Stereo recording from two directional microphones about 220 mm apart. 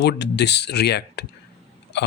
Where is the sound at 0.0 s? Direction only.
50° left (ahead or behind).